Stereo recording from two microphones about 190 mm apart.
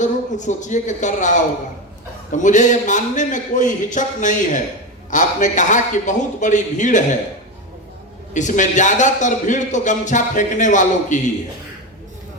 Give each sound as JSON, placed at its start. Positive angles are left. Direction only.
{"t": 0.0, "sound": "a man's voice", "side_deg": 40}
{"t": 8.3, "sound": "a man's voice", "side_deg": 40}